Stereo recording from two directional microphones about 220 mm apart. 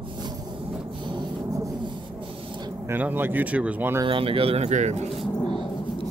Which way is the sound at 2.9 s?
10° right (ahead or behind).